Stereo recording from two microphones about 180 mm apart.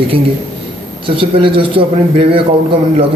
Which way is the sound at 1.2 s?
30° right (ahead or behind).